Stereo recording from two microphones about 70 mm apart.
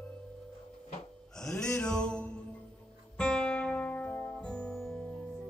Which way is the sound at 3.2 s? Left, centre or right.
Centre.